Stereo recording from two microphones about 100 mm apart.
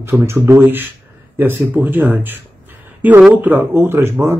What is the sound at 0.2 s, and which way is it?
Speech, 25° right (ahead or behind).